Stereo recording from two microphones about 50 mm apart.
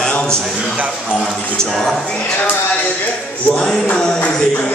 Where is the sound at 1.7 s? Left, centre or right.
Centre.